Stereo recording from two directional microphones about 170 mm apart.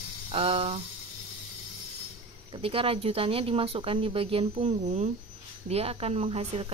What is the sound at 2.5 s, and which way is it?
Speech, 35° right (ahead or behind).